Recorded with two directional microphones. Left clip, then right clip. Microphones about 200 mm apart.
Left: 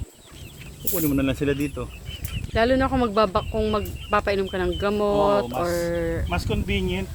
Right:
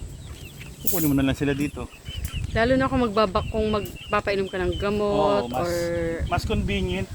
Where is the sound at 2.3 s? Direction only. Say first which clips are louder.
Left 1 dB; 10° left (ahead or behind).